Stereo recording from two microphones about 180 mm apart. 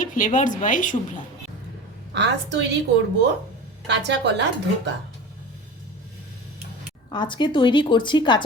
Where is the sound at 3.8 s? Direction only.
75° right (ahead or behind).